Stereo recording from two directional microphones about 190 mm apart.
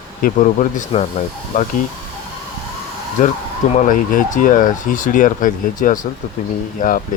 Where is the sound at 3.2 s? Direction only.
45° left (ahead or behind).